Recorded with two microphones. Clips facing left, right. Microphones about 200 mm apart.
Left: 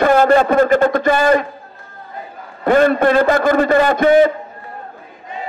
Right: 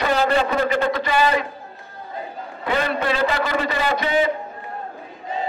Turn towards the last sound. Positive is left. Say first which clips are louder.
# left 9 dB
turn(degrees=50)  # may be behind; listen again after turning